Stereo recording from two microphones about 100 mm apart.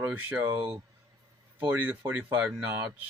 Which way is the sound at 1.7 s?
20° right (ahead or behind).